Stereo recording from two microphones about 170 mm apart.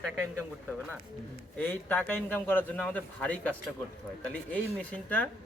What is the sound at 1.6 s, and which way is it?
Speech, 10° left (ahead or behind).